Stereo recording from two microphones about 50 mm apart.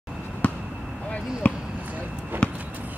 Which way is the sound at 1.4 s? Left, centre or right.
Left.